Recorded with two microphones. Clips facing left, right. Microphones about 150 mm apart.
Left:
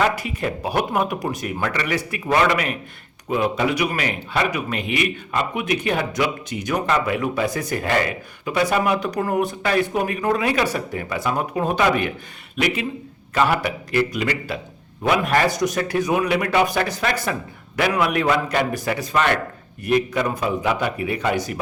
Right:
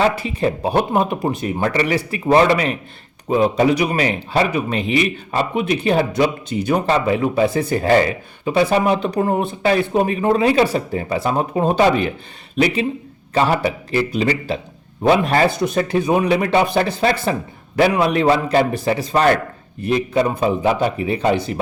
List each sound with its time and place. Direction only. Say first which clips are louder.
0.0 s a man's voice: right 4 dB; 30° right (ahead or behind)